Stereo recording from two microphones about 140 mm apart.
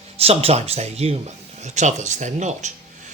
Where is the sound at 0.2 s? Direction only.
45° right (ahead or behind).